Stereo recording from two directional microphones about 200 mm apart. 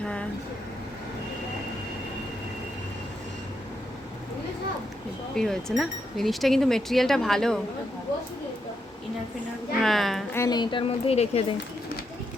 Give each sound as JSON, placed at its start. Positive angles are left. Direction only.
{"t": 0.0, "sound": "vehicle", "side_deg": 5}
{"t": 5.3, "sound": "speech", "side_deg": 5}
{"t": 9.8, "sound": "speech", "side_deg": 0}
{"t": 10.3, "sound": "speech", "side_deg": 15}